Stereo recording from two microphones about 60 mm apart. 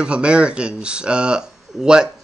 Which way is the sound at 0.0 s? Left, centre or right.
Centre.